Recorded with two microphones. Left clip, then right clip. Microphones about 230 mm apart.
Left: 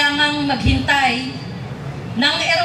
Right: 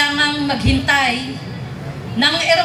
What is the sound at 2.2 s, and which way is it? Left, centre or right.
Speech, right.